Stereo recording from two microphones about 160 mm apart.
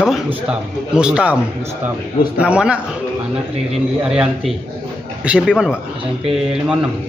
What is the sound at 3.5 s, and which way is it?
Speech, 40° right (ahead or behind).